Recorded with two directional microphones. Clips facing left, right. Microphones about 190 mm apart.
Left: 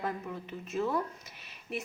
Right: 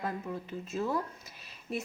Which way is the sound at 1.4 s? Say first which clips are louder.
Right 2 dB; 30° right (ahead or behind).